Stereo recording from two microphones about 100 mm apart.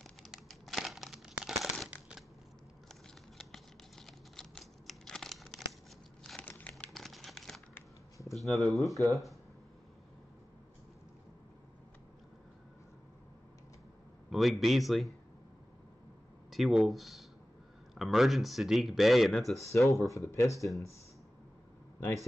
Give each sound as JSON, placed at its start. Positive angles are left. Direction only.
{"t": 0.0, "sound": "crumpling", "side_deg": 0}
{"t": 1.9, "sound": "a sound", "side_deg": -5}
{"t": 3.3, "sound": "computer keyboard", "side_deg": 5}
{"t": 6.2, "sound": "crumpling", "side_deg": 10}
{"t": 6.9, "sound": "a sound", "side_deg": 5}
{"t": 7.7, "sound": "a sound", "side_deg": 30}
{"t": 8.4, "sound": "speech", "side_deg": 0}
{"t": 14.3, "sound": "speech", "side_deg": 0}
{"t": 16.4, "sound": "speech", "side_deg": 0}
{"t": 20.1, "sound": "speech", "side_deg": 30}